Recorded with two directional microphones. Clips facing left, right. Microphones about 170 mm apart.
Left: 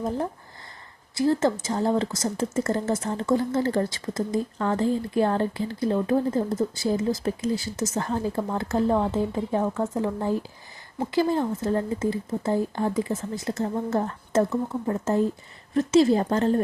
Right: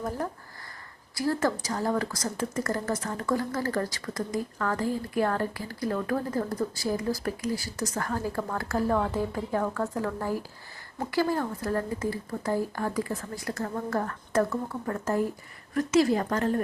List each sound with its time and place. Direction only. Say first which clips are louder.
1.1 s speech: left 5 dB; 25° left (ahead or behind)